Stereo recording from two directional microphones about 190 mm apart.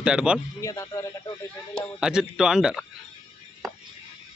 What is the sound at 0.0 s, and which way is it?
Speech, 5° right (ahead or behind).